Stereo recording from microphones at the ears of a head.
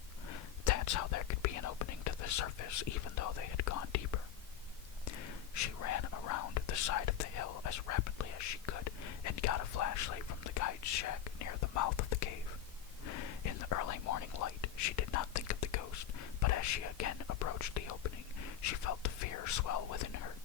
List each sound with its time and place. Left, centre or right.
0.3 s whispering: left